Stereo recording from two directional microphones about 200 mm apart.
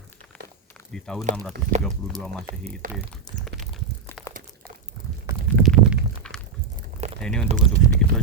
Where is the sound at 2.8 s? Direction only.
40° right (ahead or behind).